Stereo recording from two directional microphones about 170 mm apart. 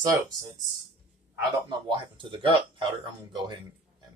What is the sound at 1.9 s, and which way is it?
Speech, 30° right (ahead or behind).